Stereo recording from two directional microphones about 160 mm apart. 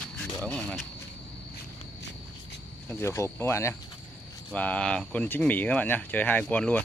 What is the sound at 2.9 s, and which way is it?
Speech, 15° left (ahead or behind).